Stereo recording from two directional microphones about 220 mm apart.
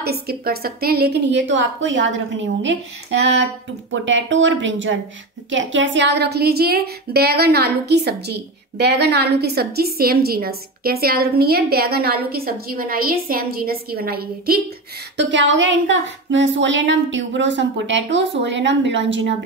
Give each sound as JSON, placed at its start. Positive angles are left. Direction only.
{"t": 0.0, "sound": "speech", "side_deg": -45}
{"t": 15.1, "sound": "speech", "side_deg": -55}